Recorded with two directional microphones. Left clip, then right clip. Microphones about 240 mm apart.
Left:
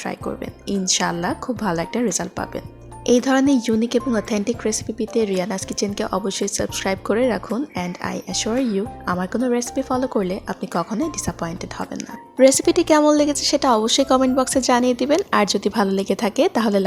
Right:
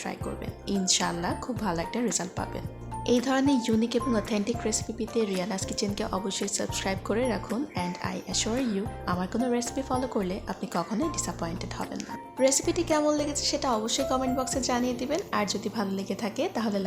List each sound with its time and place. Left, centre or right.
0.7 s a woman's voice: left
12.4 s a woman's voice: left